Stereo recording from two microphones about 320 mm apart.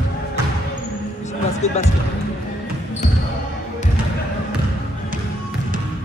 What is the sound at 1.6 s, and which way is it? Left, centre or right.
Speech, left.